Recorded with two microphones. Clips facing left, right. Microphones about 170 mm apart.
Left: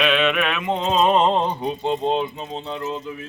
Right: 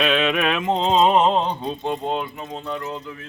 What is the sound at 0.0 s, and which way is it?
Music, 35° right (ahead or behind).